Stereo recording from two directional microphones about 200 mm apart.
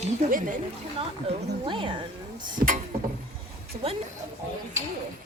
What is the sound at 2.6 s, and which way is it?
Speech, 40° right (ahead or behind).